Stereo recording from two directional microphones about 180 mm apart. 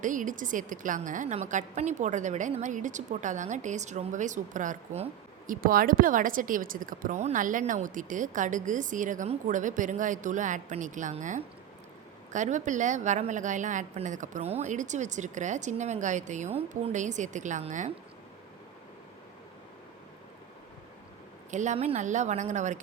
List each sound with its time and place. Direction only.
0.0 s speech: 45° right (ahead or behind)
21.5 s speech: 40° right (ahead or behind)